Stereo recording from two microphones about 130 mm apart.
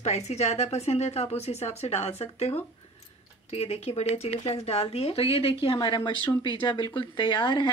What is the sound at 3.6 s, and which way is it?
Speech, 50° left (ahead or behind).